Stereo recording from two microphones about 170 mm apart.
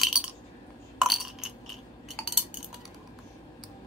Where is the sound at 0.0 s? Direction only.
5° right (ahead or behind).